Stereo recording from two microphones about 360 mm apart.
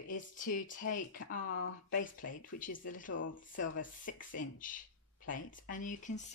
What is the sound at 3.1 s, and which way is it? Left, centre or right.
Speech, left.